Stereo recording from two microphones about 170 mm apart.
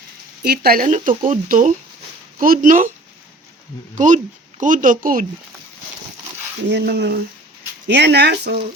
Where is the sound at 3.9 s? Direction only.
45° right (ahead or behind).